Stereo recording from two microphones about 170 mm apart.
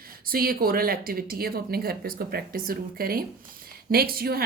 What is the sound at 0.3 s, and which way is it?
Speech, 60° right (ahead or behind).